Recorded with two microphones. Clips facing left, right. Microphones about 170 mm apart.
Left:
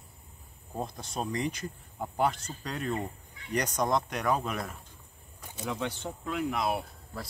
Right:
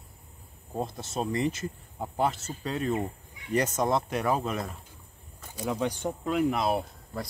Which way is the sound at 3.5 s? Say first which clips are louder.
Right 3 dB; 5° right (ahead or behind).